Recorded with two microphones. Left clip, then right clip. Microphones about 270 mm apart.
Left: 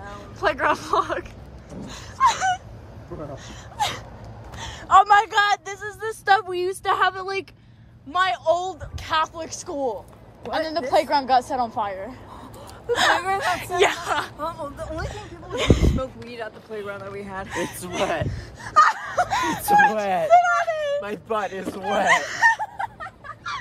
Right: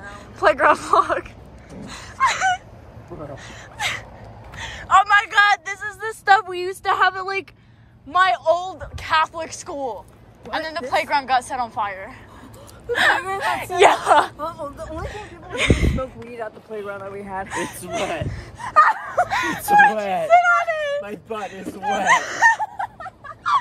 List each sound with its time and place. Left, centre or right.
0.0 s speech: centre
1.9 s dog: centre
3.4 s a man's voice: centre
15.0 s speech: centre
16.3 s speech: right
17.5 s speech: centre
18.3 s a sound: centre
19.2 s speech: centre
19.6 s speech: centre
20.2 s speech: centre